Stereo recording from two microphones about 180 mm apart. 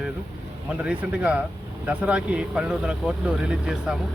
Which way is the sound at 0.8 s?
5° right (ahead or behind).